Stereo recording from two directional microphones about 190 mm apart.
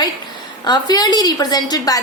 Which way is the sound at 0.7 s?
20° left (ahead or behind).